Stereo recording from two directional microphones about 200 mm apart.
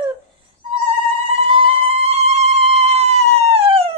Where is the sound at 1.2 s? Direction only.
25° right (ahead or behind).